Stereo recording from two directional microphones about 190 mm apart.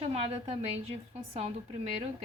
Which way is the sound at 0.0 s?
35° right (ahead or behind).